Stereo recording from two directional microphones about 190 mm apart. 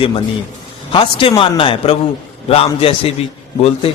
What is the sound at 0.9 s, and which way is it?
A man's voice, 30° left (ahead or behind).